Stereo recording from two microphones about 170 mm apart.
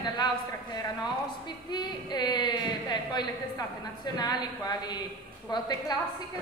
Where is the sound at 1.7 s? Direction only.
25° left (ahead or behind).